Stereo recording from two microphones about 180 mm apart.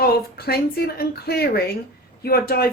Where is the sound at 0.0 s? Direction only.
60° left (ahead or behind).